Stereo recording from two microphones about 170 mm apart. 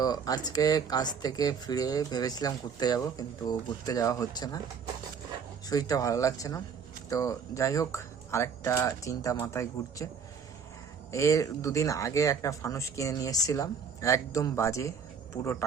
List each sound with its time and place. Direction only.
0.0 s speech: 25° left (ahead or behind)
5.6 s speech: 20° left (ahead or behind)
11.1 s speech: 20° left (ahead or behind)